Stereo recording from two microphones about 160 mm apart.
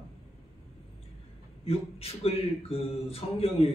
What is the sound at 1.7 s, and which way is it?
Speech, 40° left (ahead or behind).